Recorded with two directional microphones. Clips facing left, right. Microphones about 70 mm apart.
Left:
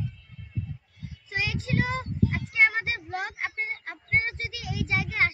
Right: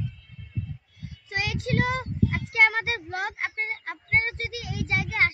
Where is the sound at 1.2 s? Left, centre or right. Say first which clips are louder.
Right 2 dB; right.